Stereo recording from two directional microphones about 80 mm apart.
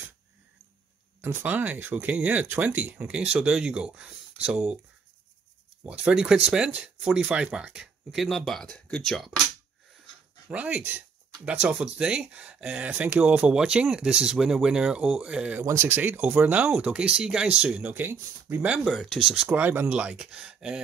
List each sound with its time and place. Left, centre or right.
1.2 s speech: right
3.1 s speech: centre
6.1 s speech: centre
8.5 s speech: centre
10.5 s speech: centre
15.6 s speech: right
18.9 s speech: centre
19.2 s speech: centre